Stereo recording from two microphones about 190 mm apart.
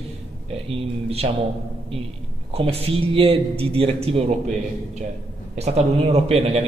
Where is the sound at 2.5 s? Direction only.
30° right (ahead or behind).